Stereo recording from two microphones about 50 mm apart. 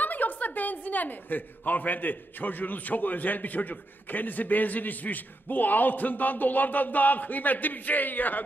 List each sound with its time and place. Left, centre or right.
0.0 s a woman's voice: left